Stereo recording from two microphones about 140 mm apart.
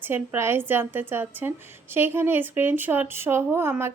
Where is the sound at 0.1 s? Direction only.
15° right (ahead or behind).